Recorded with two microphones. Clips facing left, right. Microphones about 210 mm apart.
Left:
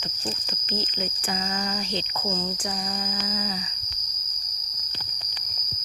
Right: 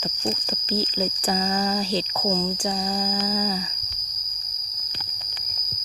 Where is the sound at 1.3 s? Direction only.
35° right (ahead or behind).